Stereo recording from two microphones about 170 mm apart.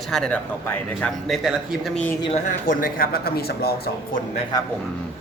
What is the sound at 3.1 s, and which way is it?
A man's voice, 65° left (ahead or behind).